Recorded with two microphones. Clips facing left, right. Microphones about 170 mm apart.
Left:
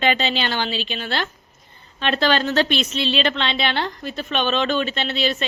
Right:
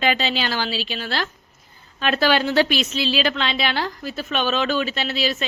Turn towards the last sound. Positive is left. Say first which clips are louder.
# left 1 dB
turn(degrees=-5)  # may be behind; listen again after turning